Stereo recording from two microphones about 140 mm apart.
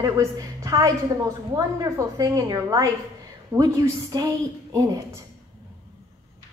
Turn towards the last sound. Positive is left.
turn(degrees=-25)  # may be behind; listen again after turning